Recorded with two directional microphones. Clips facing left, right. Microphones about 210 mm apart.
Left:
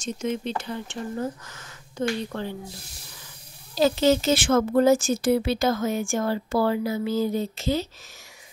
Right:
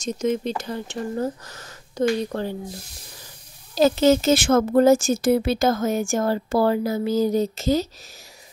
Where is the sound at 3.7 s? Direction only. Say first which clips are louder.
Right 3 dB; 45° right (ahead or behind).